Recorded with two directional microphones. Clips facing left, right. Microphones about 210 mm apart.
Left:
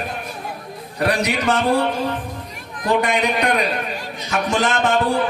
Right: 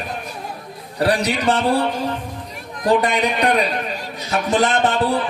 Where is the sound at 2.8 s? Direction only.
35° right (ahead or behind).